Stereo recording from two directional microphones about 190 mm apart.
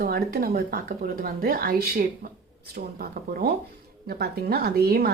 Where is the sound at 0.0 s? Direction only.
50° right (ahead or behind).